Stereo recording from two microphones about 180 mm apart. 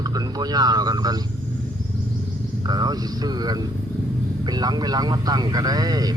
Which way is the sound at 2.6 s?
25° right (ahead or behind).